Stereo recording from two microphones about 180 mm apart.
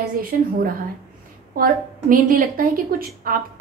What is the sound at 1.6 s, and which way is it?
A woman's voice, 50° right (ahead or behind).